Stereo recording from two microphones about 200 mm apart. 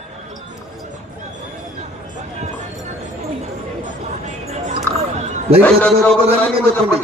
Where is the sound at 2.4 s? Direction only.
35° right (ahead or behind).